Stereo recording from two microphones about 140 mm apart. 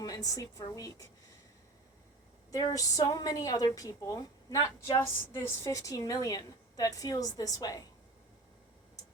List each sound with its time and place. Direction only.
0.0 s a woman's voice: 25° left (ahead or behind)
2.5 s a woman's voice: 25° left (ahead or behind)